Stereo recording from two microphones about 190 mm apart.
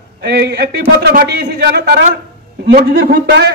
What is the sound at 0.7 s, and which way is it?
A man's voice, 55° right (ahead or behind).